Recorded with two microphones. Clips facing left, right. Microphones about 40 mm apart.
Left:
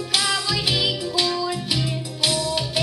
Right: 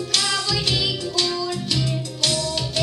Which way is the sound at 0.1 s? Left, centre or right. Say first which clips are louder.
Left 1 dB; centre.